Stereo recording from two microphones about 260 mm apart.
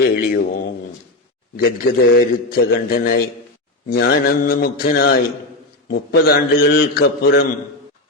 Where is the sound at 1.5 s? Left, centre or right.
Left.